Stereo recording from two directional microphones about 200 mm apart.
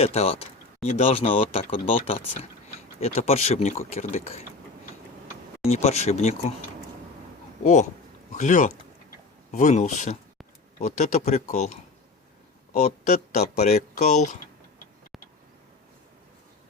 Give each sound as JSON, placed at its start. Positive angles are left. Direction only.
{"t": 0.0, "sound": "speech", "side_deg": 30}
{"t": 5.6, "sound": "speech", "side_deg": 30}
{"t": 7.6, "sound": "speech", "side_deg": 35}
{"t": 12.8, "sound": "speech", "side_deg": 35}